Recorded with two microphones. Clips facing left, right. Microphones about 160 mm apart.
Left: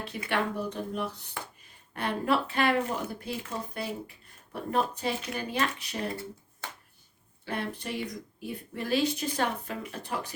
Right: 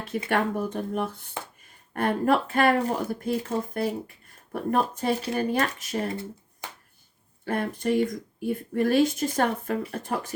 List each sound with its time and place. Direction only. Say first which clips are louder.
0.3 s speech: right 4 dB; 50° right (ahead or behind)
6.6 s a sound: right 1 dB; 15° right (ahead or behind)
7.4 s speech: right 8 dB; 45° right (ahead or behind)